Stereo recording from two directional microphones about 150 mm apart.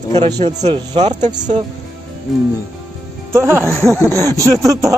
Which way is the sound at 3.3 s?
15° right (ahead or behind).